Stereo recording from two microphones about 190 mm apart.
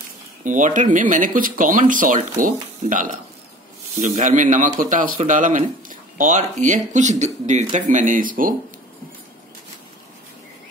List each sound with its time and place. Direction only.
0.4 s a man's voice: 40° right (ahead or behind)